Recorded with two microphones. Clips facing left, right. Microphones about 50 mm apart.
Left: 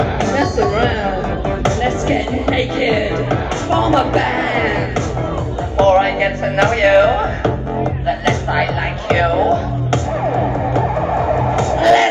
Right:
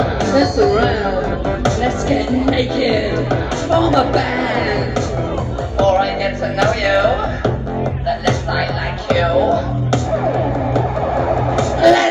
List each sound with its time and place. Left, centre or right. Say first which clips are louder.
0.2 s chatter: right 4 dB; left
1.6 s music: left 1 dB; left
5.8 s music: left 2 dB; left
10.7 s music: left 1 dB; left